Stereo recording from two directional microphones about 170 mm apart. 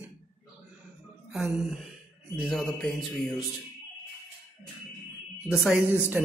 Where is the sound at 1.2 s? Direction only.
5° right (ahead or behind).